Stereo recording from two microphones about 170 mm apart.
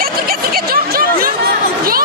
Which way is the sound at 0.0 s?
60° right (ahead or behind).